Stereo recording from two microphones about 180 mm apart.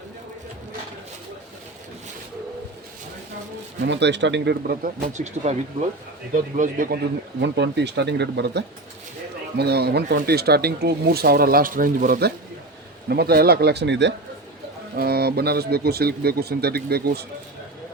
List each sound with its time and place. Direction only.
3.8 s speech: 80° right; by 7.0 s 50° right (ahead or behind)
7.3 s speech: 70° right (ahead or behind)
14.9 s speech: 60° right (ahead or behind)